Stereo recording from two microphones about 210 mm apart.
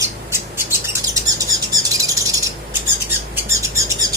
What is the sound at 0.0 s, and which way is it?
Bird, 10° right (ahead or behind).